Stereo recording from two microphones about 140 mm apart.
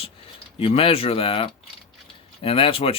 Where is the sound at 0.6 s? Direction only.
40° left (ahead or behind).